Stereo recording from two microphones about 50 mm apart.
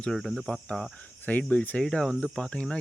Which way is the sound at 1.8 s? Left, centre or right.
Centre.